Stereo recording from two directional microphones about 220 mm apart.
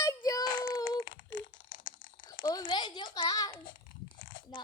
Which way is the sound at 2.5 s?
20° left (ahead or behind).